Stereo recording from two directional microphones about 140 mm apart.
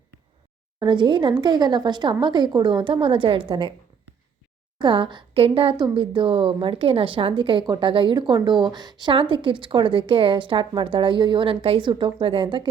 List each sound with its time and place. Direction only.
0.8 s a woman's voice: 35° right (ahead or behind)
4.8 s a woman's voice: 35° right (ahead or behind)